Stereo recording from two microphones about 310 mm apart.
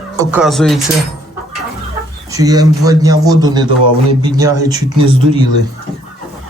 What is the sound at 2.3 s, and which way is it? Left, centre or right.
Speech, centre.